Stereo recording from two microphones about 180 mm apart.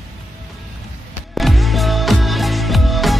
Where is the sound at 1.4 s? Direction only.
Centre (ahead or behind).